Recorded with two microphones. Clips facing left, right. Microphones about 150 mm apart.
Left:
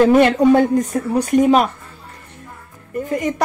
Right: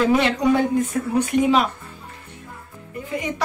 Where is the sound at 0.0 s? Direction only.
50° left (ahead or behind).